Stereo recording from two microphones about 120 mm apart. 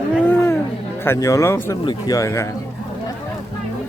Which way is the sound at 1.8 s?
35° left (ahead or behind).